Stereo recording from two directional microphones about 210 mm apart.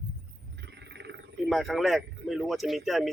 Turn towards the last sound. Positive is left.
turn(degrees=0)  # may be behind; listen again after turning